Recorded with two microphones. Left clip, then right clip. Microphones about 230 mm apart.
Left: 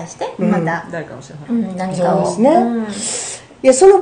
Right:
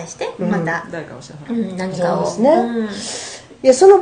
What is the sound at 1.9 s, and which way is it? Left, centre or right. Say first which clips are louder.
A woman's voice: left 3 dB; left.